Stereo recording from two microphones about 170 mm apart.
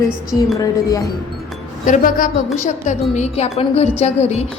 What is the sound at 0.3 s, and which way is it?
Speech, 20° left (ahead or behind).